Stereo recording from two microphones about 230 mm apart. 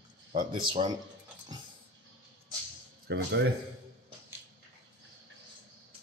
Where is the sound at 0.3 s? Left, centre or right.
Right.